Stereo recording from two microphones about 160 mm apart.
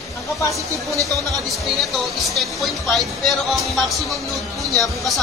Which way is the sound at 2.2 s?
Centre (ahead or behind).